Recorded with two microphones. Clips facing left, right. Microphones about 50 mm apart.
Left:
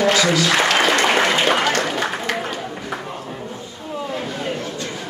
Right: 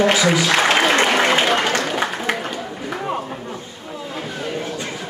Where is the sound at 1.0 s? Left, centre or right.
Centre.